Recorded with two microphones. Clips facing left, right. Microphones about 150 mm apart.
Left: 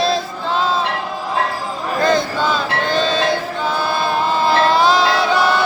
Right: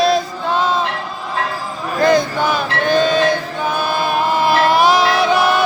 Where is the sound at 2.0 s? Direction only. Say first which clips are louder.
Right 3 dB; 20° right (ahead or behind).